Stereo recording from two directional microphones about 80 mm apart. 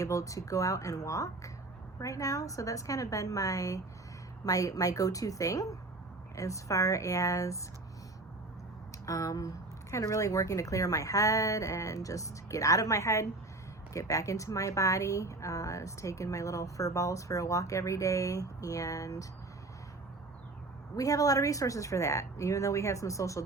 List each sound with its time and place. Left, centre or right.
0.0 s a woman's voice: left
9.0 s a woman's voice: left
20.9 s a woman's voice: left